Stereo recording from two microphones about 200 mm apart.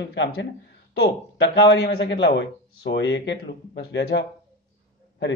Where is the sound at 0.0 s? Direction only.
65° left (ahead or behind).